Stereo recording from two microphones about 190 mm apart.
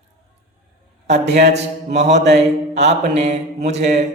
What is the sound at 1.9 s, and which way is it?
Mantra, 35° right (ahead or behind).